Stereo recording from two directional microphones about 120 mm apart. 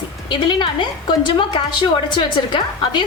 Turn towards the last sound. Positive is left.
turn(degrees=40)  # may be behind; listen again after turning